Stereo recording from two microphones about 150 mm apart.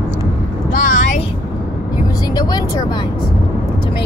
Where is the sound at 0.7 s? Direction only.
60° left (ahead or behind).